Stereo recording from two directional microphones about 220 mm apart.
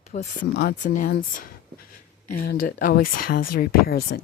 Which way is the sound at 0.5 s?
45° left (ahead or behind).